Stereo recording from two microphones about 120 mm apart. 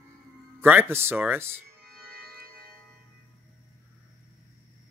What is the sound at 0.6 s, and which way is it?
Speech, 15° right (ahead or behind).